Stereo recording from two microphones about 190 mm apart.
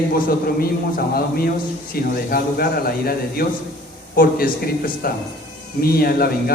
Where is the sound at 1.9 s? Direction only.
50° left (ahead or behind).